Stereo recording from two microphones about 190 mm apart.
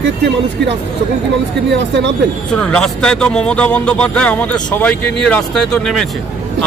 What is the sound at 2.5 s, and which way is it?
A man's voice, 5° left (ahead or behind).